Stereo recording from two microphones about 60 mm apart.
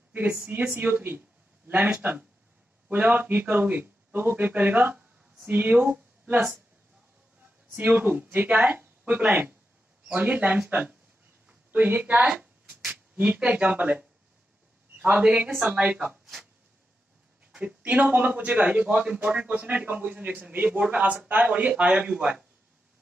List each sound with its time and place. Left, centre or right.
0.1 s speech: right
7.7 s speech: right
12.3 s a sound: right
13.2 s speech: right
17.5 s speech: centre
19.4 s speech: right